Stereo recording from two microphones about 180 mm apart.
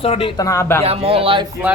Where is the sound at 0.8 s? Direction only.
30° right (ahead or behind).